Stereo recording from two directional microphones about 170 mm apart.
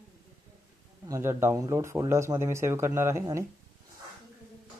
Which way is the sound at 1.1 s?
15° right (ahead or behind).